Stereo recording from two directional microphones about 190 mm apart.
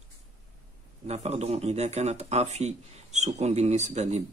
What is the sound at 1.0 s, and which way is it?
Speech, 35° right (ahead or behind).